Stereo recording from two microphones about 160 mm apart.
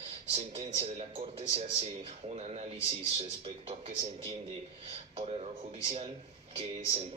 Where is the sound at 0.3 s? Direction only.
40° right (ahead or behind).